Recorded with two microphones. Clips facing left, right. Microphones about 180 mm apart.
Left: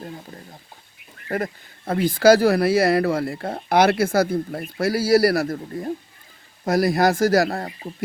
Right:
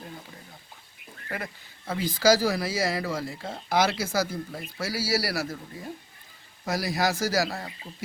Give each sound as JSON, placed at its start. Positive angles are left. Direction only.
{"t": 1.3, "sound": "speech", "side_deg": 45}